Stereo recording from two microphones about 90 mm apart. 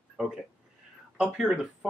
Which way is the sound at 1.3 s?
5° right (ahead or behind).